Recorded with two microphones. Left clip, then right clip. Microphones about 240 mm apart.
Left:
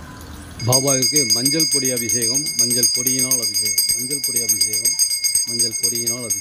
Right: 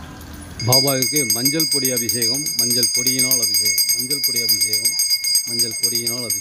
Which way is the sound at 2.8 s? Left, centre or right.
Right.